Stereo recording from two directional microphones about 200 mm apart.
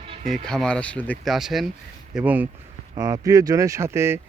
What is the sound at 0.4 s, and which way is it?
Speech, 5° left (ahead or behind).